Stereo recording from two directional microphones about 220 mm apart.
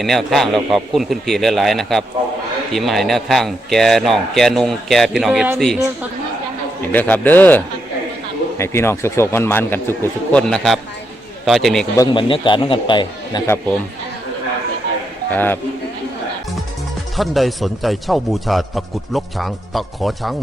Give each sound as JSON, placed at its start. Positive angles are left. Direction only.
{"t": 0.0, "sound": "a man's voice", "side_deg": 0}
{"t": 6.9, "sound": "a man's voice", "side_deg": 5}
{"t": 11.9, "sound": "a man's voice", "side_deg": 20}
{"t": 15.3, "sound": "a man's voice", "side_deg": 10}
{"t": 17.2, "sound": "a man's voice", "side_deg": 0}